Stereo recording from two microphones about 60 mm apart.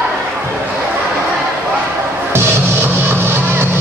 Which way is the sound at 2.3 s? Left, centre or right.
Right.